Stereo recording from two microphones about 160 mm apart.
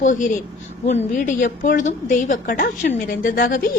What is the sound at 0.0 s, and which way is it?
A woman's voice, 55° left (ahead or behind).